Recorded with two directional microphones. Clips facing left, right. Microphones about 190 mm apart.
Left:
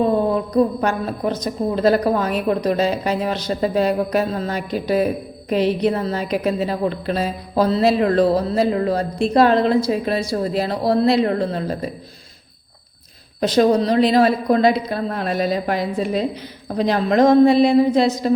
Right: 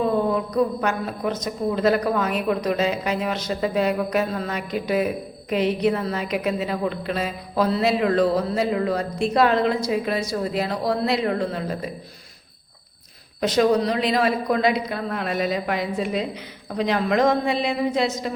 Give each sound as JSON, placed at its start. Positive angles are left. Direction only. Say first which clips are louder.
{"t": 0.5, "sound": "a woman's voice", "louder": "left 4 dB", "side_deg": 35}
{"t": 13.4, "sound": "a woman's voice", "louder": "left 3 dB", "side_deg": 35}